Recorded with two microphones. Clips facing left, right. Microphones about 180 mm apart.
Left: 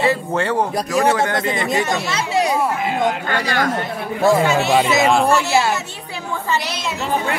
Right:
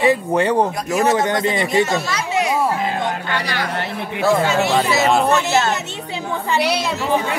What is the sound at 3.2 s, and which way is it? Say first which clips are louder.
Speech: left 3 dB; 50° left (ahead or behind).